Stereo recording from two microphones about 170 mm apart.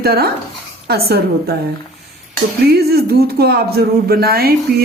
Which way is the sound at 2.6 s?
65° right (ahead or behind).